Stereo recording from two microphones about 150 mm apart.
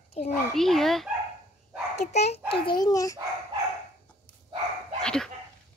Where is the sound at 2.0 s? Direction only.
50° left (ahead or behind).